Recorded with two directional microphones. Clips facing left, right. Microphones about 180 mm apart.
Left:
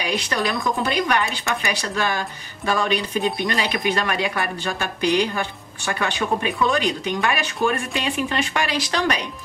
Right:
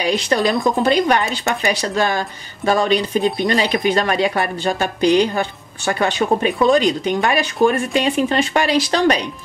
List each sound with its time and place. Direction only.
0.0 s speech: 35° right (ahead or behind)